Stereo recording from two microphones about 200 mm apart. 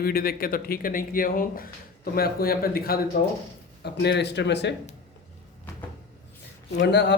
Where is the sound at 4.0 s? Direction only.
60° left (ahead or behind).